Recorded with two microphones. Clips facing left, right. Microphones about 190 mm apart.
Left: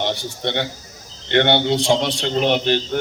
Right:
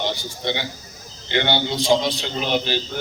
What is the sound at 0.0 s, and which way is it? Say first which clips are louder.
A man's voice: left 2 dB; 60° left (ahead or behind).